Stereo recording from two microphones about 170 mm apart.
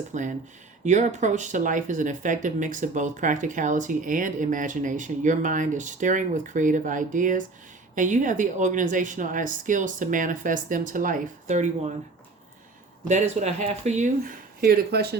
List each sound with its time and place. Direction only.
0.1 s speech: 45° right (ahead or behind)
13.1 s speech: 45° right (ahead or behind)
14.6 s speech: 65° right (ahead or behind)